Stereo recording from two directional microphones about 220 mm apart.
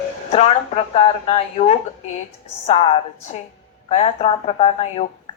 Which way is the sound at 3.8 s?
30° left (ahead or behind).